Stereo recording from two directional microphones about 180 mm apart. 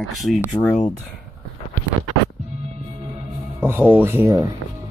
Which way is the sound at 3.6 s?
10° right (ahead or behind).